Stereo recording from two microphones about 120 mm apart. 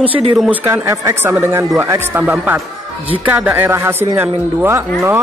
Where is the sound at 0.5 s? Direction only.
20° right (ahead or behind).